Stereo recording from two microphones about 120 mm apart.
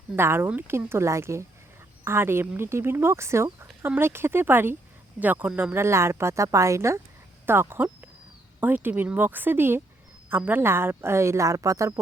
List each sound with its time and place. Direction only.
0.2 s speech: 20° right (ahead or behind)